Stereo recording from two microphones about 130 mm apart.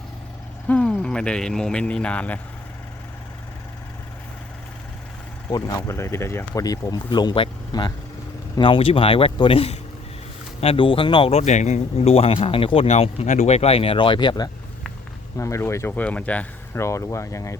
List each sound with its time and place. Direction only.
0.7 s speech: 10° left (ahead or behind)
5.5 s speech: 25° left (ahead or behind)
15.4 s speech: 20° left (ahead or behind)
16.7 s speech: 20° left (ahead or behind)